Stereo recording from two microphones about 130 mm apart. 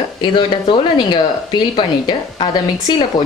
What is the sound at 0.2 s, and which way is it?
Speech, 35° left (ahead or behind).